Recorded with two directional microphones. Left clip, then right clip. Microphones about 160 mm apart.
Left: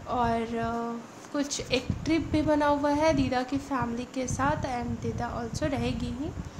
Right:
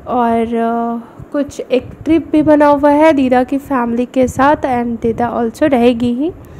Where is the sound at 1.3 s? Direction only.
30° right (ahead or behind).